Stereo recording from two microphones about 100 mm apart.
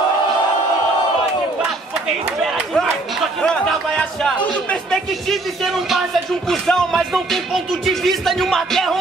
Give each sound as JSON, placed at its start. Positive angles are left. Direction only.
{"t": 3.9, "sound": "music", "side_deg": 10}
{"t": 6.5, "sound": "music", "side_deg": 5}